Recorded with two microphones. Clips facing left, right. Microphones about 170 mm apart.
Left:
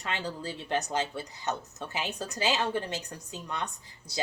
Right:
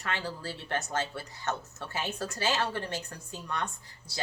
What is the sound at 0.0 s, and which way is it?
Speech, 20° left (ahead or behind).